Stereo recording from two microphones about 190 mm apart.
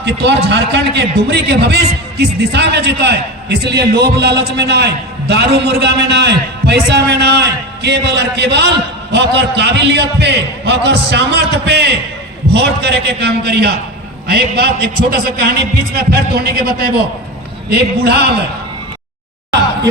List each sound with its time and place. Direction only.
0.0 s a man's voice: 60° right (ahead or behind)